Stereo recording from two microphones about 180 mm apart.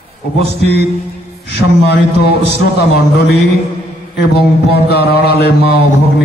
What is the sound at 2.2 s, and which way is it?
Mantra, 65° left (ahead or behind).